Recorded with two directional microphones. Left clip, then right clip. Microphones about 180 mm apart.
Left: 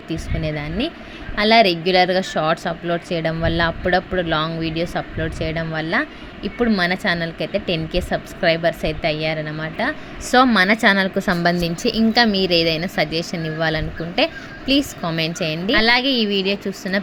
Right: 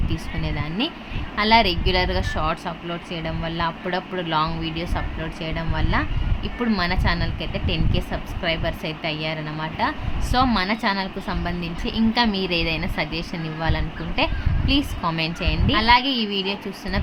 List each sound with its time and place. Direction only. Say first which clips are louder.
0.1 s a woman's voice: left 7 dB; 20° left (ahead or behind)
10.3 s a woman's voice: left 7 dB; 30° left (ahead or behind); by 11.9 s 45° left (ahead or behind)
11.9 s a woman's voice: left 5 dB; 25° left (ahead or behind)